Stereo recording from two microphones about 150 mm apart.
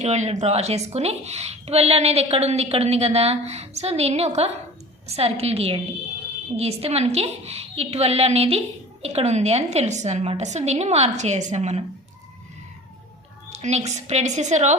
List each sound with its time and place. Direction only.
0.0 s a woman's voice: 50° right (ahead or behind)
13.5 s a woman's voice: 45° right (ahead or behind)